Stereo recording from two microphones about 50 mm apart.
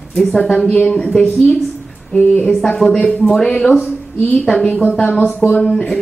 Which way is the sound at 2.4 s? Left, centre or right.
Centre.